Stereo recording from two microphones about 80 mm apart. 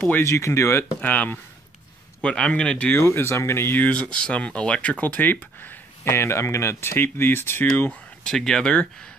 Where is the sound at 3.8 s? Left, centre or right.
Centre.